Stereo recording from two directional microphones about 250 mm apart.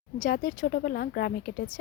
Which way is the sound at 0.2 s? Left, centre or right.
Left.